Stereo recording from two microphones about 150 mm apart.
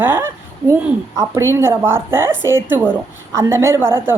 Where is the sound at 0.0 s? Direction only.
15° right (ahead or behind).